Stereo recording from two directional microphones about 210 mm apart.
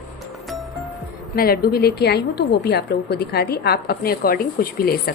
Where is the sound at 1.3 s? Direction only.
45° left (ahead or behind).